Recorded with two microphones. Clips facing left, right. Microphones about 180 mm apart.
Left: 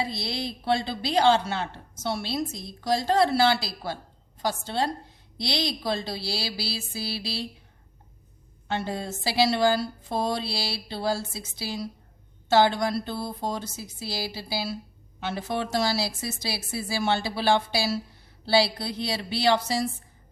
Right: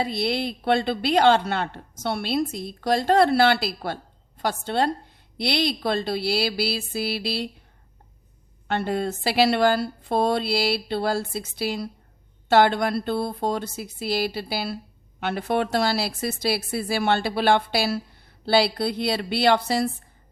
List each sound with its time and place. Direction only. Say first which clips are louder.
0.0 s a woman's voice: right 6 dB; 60° right (ahead or behind)
8.6 s a woman's voice: right 5 dB; 60° right (ahead or behind)